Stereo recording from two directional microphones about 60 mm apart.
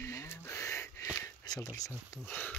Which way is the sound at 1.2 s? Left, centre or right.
Left.